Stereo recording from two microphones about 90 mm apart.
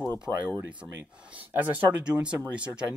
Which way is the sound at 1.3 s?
20° right (ahead or behind).